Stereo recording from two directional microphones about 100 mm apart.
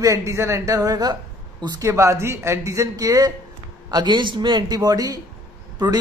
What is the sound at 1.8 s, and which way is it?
A man's voice, 30° right (ahead or behind).